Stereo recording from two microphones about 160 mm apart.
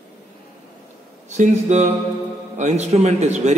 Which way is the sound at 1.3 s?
50° right (ahead or behind).